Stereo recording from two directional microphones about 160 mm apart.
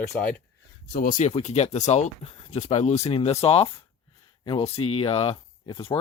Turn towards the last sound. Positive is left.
turn(degrees=35)  # may be behind; listen again after turning